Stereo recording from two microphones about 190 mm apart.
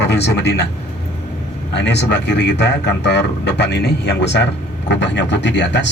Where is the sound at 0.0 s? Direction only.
60° left (ahead or behind).